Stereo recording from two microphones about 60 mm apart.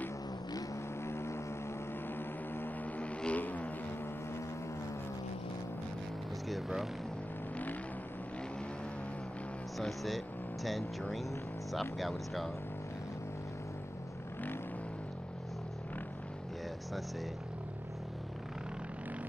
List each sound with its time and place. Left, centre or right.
1.0 s vehicle: left
2.1 s vehicle: left
3.0 s vehicle: left
9.8 s speech: centre